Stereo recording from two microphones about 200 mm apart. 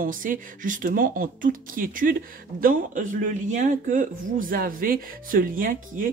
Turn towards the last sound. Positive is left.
turn(degrees=-45)  # may be behind; listen again after turning